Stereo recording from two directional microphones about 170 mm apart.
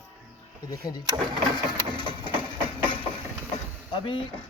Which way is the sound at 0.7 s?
25° left (ahead or behind).